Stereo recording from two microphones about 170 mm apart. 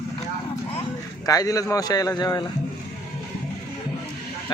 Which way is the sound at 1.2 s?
20° left (ahead or behind).